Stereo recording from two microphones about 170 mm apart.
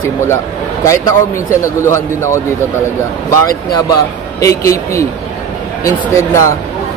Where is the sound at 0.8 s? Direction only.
15° left (ahead or behind).